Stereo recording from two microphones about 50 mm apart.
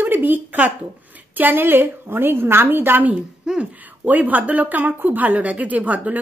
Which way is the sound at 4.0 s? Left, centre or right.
Right.